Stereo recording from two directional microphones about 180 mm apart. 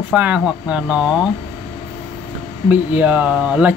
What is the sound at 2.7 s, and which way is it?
Speech, 10° right (ahead or behind).